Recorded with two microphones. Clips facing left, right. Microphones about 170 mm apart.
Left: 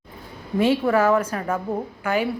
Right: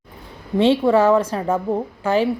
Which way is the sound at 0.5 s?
25° right (ahead or behind).